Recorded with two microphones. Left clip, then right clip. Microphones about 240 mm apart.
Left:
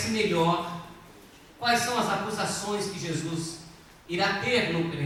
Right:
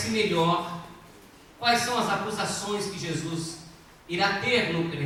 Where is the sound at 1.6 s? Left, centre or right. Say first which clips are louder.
Right 1 dB; centre.